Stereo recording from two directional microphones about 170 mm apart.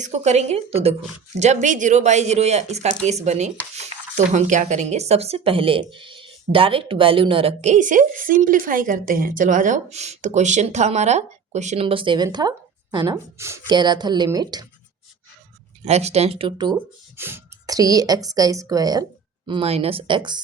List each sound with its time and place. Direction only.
0.0 s speech: 40° right (ahead or behind); by 14.7 s 20° right (ahead or behind)
15.8 s speech: 40° right (ahead or behind)
16.7 s speech: 15° right (ahead or behind)
19.5 s speech: 35° right (ahead or behind)